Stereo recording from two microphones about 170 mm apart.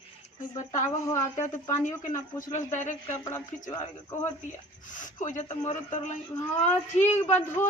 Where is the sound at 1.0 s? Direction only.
20° left (ahead or behind).